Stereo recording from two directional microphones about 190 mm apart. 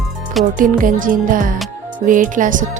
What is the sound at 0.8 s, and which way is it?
Speech, 45° right (ahead or behind).